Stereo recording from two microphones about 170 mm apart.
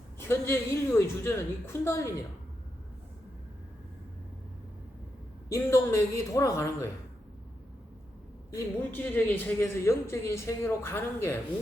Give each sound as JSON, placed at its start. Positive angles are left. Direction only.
{"t": 0.2, "sound": "a man's voice", "side_deg": 15}
{"t": 5.5, "sound": "a man's voice", "side_deg": 15}
{"t": 8.4, "sound": "a man's voice", "side_deg": 15}